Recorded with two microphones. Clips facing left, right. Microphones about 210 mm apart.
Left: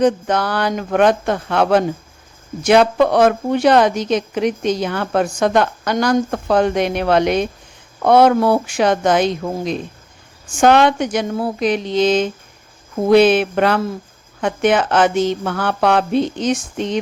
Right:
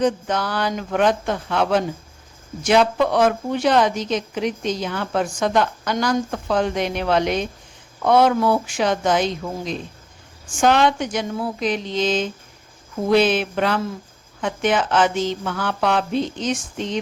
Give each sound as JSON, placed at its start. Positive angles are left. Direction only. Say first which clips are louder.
{"t": 0.0, "sound": "a woman's voice", "louder": "left 5 dB", "side_deg": 65}